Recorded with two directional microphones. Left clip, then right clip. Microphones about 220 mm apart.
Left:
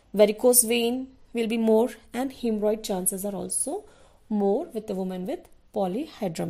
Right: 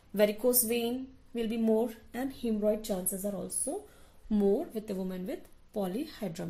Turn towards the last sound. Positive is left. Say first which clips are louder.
# left 7 dB
turn(degrees=35)  # may be behind; listen again after turning